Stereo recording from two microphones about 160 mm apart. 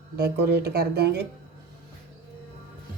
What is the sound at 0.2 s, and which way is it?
Speech, 90° right.